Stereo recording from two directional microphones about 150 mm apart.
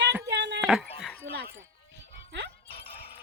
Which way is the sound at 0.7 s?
5° right (ahead or behind).